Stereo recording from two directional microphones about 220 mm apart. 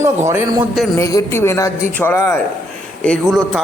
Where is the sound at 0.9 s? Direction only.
15° left (ahead or behind).